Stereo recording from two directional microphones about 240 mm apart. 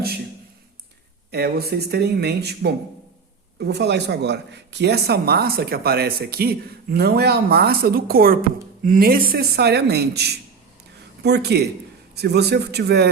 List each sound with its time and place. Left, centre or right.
1.3 s speech: right